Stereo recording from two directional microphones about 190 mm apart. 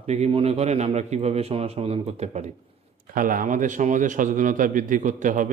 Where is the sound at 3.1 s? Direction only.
45° right (ahead or behind).